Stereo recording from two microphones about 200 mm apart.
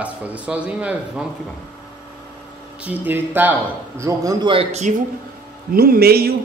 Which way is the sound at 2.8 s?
10° right (ahead or behind).